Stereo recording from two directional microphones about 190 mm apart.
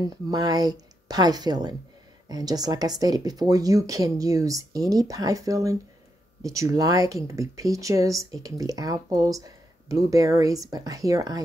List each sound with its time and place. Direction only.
0.0 s speech: 20° right (ahead or behind)